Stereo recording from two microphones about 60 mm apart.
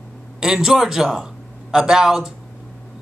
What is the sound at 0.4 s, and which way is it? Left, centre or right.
A man's voice, centre.